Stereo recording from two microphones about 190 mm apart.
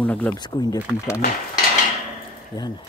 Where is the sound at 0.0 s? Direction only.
10° left (ahead or behind).